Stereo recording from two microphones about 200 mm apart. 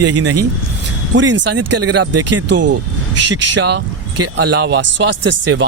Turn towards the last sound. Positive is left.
turn(degrees=-65)  # may be behind; listen again after turning